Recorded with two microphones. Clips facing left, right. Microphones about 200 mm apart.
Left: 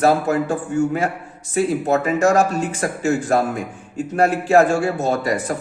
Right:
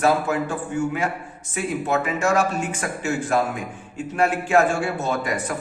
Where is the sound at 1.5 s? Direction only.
40° left (ahead or behind).